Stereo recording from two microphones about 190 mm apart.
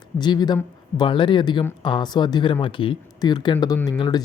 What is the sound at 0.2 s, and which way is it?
Speech, 20° left (ahead or behind).